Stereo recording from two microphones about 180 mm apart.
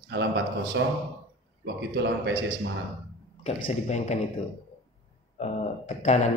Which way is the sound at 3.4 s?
40° left (ahead or behind).